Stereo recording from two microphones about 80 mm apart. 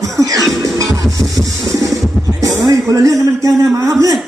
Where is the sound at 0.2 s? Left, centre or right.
Right.